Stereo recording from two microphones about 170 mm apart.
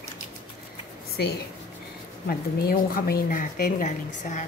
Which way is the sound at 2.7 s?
60° left (ahead or behind).